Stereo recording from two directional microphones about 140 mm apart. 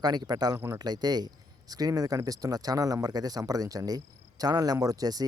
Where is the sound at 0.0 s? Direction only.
30° right (ahead or behind).